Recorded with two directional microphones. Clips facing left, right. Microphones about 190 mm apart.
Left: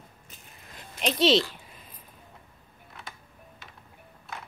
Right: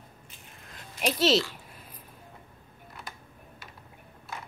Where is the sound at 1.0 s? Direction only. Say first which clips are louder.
Even; 5° right (ahead or behind).